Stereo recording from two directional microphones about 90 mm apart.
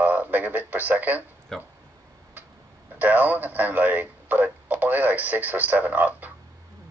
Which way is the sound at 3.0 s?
20° right (ahead or behind).